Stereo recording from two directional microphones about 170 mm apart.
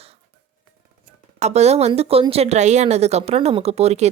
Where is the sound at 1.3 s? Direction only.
40° right (ahead or behind).